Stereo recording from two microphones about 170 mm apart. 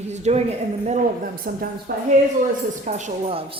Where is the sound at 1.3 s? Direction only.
60° right (ahead or behind).